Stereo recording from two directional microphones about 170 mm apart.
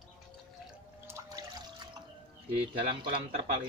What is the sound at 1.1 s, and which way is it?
Liquid, 15° right (ahead or behind).